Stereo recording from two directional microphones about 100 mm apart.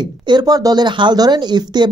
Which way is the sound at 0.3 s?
40° right (ahead or behind).